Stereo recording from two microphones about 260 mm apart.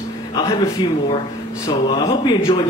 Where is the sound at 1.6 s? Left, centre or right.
Centre.